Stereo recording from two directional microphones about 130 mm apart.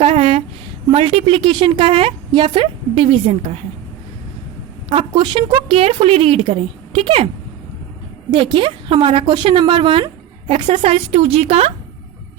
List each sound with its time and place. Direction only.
0.0 s a woman's voice: 45° right (ahead or behind)
4.9 s a woman's voice: 40° right (ahead or behind)
8.3 s a woman's voice: 40° right (ahead or behind)